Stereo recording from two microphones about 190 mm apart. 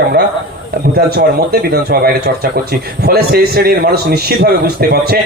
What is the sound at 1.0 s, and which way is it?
A man's voice, 55° right (ahead or behind).